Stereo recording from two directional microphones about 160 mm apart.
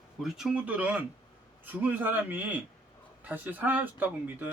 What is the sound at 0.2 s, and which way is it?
Speech, centre (ahead or behind).